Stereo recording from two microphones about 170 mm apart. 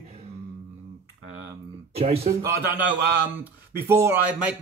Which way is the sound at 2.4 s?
15° right (ahead or behind).